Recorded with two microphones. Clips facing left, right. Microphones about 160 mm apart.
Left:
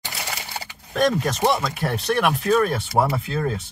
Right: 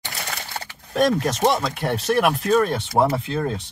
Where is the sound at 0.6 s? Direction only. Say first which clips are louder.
Right 1 dB; centre (ahead or behind).